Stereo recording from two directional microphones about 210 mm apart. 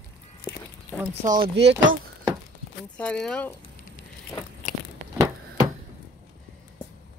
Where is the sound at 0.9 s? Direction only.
5° left (ahead or behind).